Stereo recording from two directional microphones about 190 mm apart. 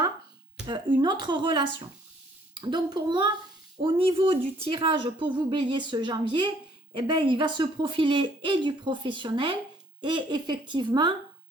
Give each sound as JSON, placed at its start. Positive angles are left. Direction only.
{"t": 0.7, "sound": "speech", "side_deg": -25}